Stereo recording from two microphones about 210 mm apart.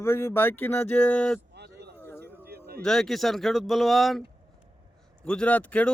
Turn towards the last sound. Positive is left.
turn(degrees=5)  # may be behind; listen again after turning